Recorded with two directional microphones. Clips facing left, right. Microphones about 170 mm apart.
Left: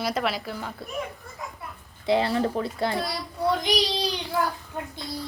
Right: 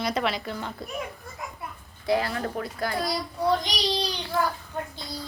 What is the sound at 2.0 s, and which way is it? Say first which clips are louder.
Speech: left 3 dB; 25° left (ahead or behind).